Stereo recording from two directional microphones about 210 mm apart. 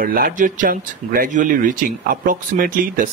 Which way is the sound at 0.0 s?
45° right (ahead or behind).